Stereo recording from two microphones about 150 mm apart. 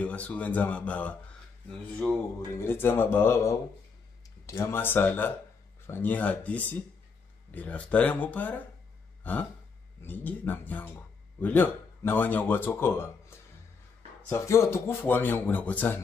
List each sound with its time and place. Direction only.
0.0 s speech: 10° left (ahead or behind)
2.5 s speech: 15° left (ahead or behind)
9.2 s gasp: 10° left (ahead or behind)
10.0 s speech: 10° left (ahead or behind)